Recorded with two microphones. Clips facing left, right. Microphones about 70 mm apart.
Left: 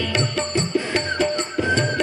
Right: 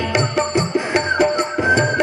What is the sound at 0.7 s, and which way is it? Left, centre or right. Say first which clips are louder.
Music: right 5 dB; centre.